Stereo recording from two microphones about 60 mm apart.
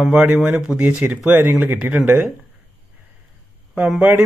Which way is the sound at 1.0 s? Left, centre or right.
Centre.